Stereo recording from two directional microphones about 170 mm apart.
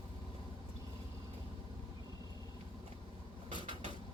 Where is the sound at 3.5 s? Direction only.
30° left (ahead or behind).